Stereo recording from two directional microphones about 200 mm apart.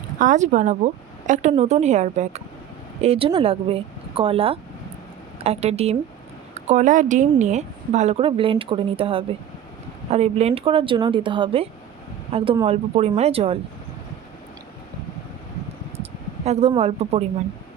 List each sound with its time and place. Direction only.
0.2 s speech: 40° right (ahead or behind)
16.5 s speech: 30° right (ahead or behind)